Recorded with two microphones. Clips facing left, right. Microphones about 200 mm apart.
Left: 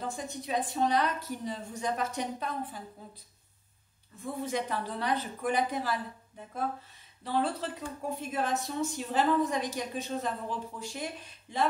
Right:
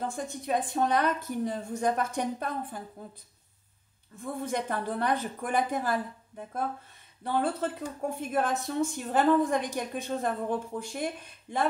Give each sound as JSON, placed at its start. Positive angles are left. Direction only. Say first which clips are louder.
{"t": 0.1, "sound": "speech", "louder": "right 3 dB", "side_deg": -50}
{"t": 4.4, "sound": "speech", "louder": "right 1 dB", "side_deg": -55}
{"t": 7.2, "sound": "speech", "louder": "right 2 dB", "side_deg": -50}